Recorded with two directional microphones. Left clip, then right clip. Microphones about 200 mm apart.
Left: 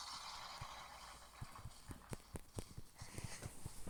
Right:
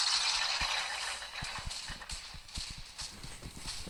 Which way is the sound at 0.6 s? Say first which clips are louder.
Right 19 dB; 40° right (ahead or behind).